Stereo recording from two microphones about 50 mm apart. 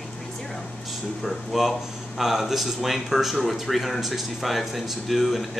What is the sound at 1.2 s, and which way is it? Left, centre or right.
Speech, centre.